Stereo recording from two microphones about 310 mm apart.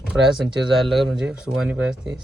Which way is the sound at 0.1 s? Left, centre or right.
Centre.